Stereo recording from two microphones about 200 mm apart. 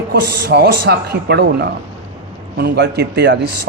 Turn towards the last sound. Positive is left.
turn(degrees=-60)  # may be behind; listen again after turning